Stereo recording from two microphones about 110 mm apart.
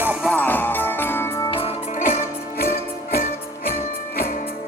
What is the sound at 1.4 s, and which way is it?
Music, 55° left (ahead or behind).